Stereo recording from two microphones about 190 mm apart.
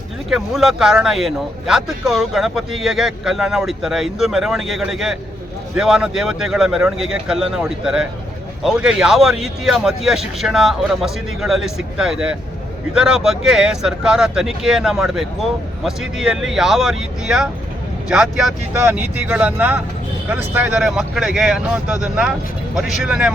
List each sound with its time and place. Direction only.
0.3 s speech: centre (ahead or behind)